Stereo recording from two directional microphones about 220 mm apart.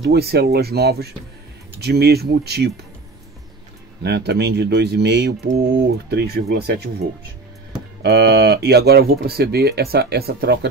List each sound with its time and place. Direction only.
0.0 s speech: 45° right (ahead or behind)
4.0 s speech: 50° right (ahead or behind)
8.0 s speech: 50° right (ahead or behind)